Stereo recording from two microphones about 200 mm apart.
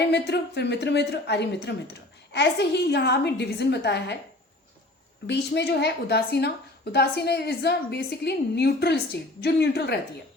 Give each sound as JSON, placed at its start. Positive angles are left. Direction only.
{"t": 0.1, "sound": "a woman's voice", "side_deg": 55}
{"t": 5.2, "sound": "a woman's voice", "side_deg": 55}